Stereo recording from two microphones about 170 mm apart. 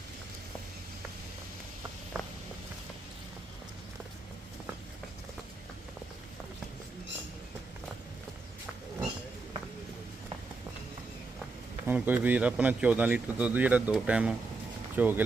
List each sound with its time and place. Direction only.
2.1 s walk: 20° right (ahead or behind)
11.9 s speech: 10° right (ahead or behind)